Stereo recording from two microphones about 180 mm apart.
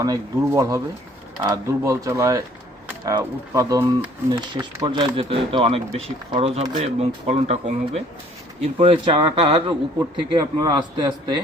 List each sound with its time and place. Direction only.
0.0 s a man's voice: 20° right (ahead or behind)